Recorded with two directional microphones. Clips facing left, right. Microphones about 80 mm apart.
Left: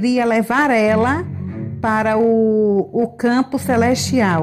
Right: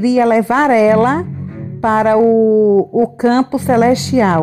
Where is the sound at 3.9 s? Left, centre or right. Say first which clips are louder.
Right 4 dB; right.